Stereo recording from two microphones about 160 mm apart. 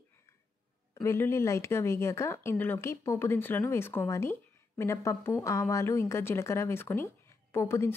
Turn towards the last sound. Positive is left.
turn(degrees=15)  # may be behind; listen again after turning